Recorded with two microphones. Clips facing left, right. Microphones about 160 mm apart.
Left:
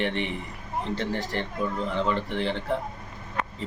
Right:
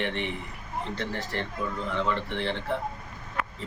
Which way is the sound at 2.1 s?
15° left (ahead or behind).